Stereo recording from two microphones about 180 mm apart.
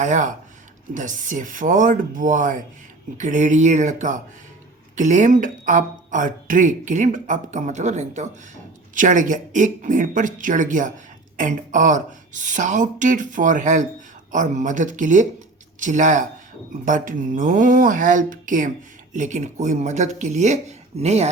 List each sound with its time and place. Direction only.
0.0 s speech: 45° right (ahead or behind)